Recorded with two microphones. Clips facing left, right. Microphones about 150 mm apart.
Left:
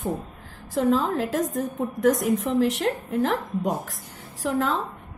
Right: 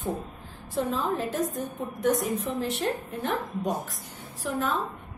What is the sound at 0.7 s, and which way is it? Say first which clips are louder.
A woman's voice: left 6 dB; 90° left.